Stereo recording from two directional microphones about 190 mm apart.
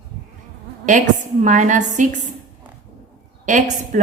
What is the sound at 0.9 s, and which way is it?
A woman's voice, 40° right (ahead or behind).